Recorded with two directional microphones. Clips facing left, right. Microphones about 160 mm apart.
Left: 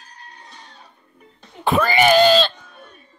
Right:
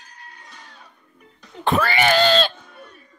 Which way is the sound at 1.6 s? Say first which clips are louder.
Left 2 dB; 10° left (ahead or behind).